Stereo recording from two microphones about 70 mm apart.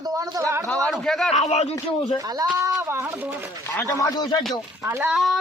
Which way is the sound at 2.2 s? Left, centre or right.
Right.